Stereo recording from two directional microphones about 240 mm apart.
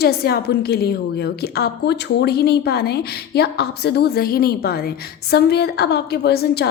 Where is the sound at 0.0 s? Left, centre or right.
Left.